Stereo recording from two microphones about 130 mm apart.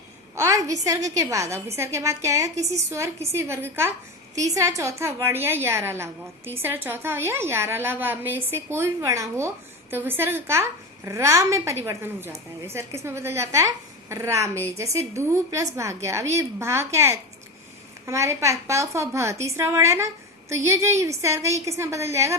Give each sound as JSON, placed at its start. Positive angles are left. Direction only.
{"t": 0.3, "sound": "a woman's voice", "side_deg": -25}